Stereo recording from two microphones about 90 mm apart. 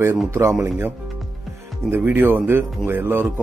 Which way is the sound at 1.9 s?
20° right (ahead or behind).